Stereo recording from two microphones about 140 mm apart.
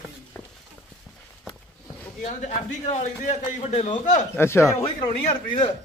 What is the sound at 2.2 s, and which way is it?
A man's voice, 55° left (ahead or behind).